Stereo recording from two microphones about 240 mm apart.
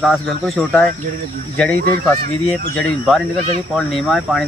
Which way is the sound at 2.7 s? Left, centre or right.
Centre.